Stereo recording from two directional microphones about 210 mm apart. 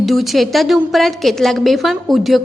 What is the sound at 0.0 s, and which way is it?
A woman's voice, centre (ahead or behind).